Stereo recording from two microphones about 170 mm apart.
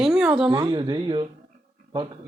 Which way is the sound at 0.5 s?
25° right (ahead or behind).